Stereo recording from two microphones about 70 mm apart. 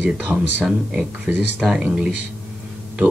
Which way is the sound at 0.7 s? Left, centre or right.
Centre.